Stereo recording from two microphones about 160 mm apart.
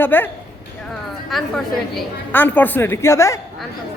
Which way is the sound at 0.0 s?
10° left (ahead or behind).